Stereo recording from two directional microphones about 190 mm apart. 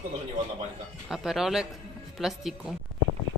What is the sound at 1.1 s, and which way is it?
Speech, centre (ahead or behind).